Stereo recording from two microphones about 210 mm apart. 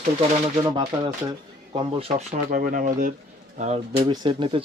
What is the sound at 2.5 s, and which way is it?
Speech, 40° right (ahead or behind).